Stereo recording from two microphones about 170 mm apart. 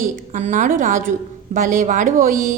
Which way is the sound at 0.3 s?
45° right (ahead or behind).